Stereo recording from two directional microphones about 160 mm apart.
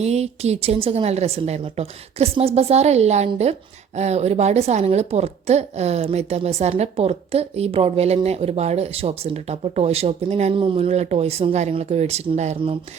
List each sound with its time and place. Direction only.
0.0 s a woman's voice: 40° right (ahead or behind)